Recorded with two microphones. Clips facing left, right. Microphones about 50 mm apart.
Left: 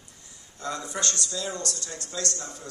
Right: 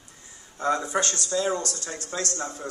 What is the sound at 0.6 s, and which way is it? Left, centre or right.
A man's voice, right.